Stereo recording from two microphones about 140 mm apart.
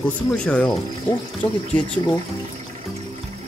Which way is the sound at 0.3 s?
5° left (ahead or behind).